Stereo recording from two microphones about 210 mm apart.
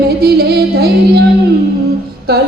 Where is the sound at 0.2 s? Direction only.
50° right (ahead or behind).